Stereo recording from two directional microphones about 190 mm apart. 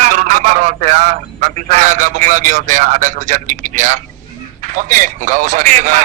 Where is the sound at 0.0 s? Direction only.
40° right (ahead or behind).